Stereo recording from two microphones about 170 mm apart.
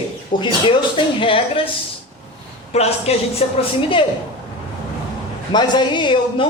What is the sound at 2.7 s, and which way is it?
A man's voice, 40° left (ahead or behind).